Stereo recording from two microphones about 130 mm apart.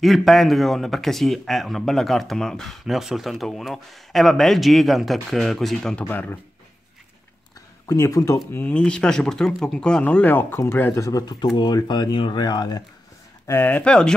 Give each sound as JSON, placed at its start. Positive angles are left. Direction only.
{"t": 0.0, "sound": "speech", "side_deg": 0}
{"t": 6.0, "sound": "speech", "side_deg": 15}
{"t": 7.8, "sound": "speech", "side_deg": 25}
{"t": 8.5, "sound": "speech", "side_deg": 15}
{"t": 13.5, "sound": "speech", "side_deg": 15}